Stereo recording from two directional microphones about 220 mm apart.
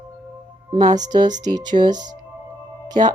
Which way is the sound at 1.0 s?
20° right (ahead or behind).